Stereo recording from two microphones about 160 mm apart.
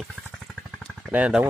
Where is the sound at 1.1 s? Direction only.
10° right (ahead or behind).